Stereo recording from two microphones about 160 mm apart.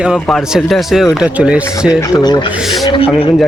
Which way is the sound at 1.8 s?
25° left (ahead or behind).